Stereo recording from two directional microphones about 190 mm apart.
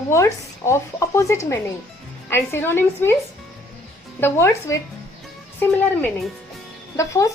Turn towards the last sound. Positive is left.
turn(degrees=15)  # may be behind; listen again after turning